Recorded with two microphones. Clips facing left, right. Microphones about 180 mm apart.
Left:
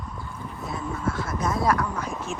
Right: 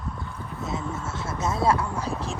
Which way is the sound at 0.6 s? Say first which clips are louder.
Left 2 dB; 25° right (ahead or behind).